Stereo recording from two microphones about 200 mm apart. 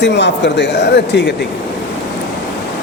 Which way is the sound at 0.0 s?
60° left (ahead or behind).